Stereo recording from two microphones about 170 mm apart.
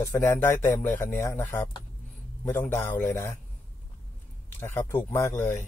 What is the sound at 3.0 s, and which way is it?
Speech, 15° left (ahead or behind).